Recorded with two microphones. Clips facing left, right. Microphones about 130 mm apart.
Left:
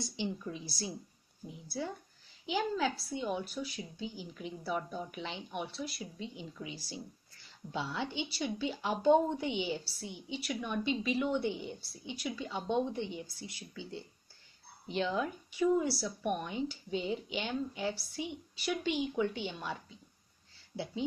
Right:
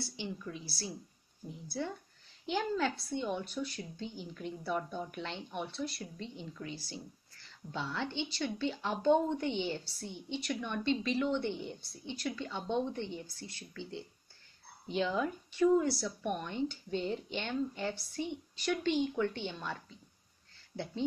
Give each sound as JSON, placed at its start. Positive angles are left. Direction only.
{"t": 0.0, "sound": "a woman's voice", "side_deg": 20}
{"t": 1.8, "sound": "a woman's voice", "side_deg": 5}